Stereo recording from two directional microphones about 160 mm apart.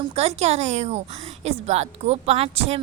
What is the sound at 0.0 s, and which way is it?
A woman's voice, 40° right (ahead or behind).